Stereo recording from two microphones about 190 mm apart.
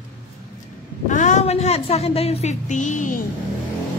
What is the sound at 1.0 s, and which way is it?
A woman's voice, 40° left (ahead or behind).